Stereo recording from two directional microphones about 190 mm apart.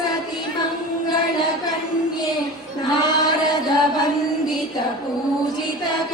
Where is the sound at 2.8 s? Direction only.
20° left (ahead or behind).